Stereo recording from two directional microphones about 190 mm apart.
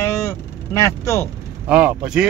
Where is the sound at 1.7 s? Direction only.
5° right (ahead or behind).